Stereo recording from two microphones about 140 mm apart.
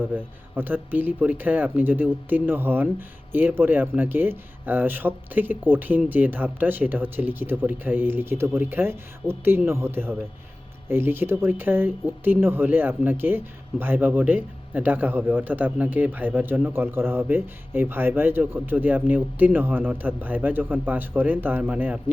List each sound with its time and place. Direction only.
0.0 s speech: 15° right (ahead or behind)